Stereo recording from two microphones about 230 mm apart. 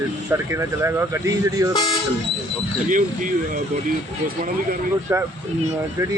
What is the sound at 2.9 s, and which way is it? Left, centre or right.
Speech, right.